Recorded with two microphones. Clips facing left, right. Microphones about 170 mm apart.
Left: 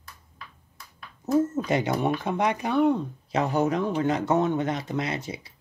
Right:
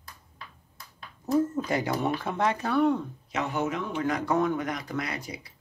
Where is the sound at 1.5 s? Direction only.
20° left (ahead or behind).